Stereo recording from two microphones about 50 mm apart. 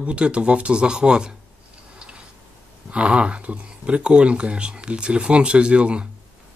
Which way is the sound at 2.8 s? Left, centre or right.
Right.